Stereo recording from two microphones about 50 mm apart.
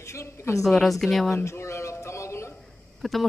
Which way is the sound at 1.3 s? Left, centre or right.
Left.